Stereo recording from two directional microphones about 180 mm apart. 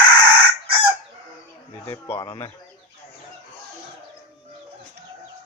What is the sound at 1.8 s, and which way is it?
Speech, 15° left (ahead or behind).